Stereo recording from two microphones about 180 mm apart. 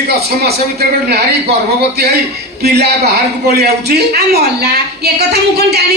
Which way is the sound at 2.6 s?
65° right (ahead or behind).